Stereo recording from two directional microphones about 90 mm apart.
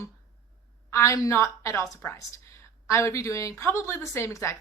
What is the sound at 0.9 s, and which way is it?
A woman's voice, 30° left (ahead or behind).